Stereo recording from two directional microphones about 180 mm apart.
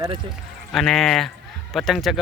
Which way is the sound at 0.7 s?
Centre (ahead or behind).